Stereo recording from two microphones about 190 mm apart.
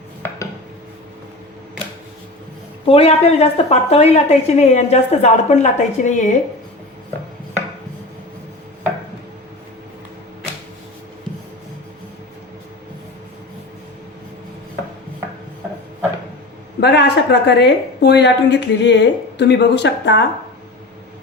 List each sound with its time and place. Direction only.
2.8 s a woman's voice: 30° left (ahead or behind)
16.8 s a woman's voice: 60° left (ahead or behind)